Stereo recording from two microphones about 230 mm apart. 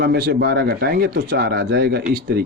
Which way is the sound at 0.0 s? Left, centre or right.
Right.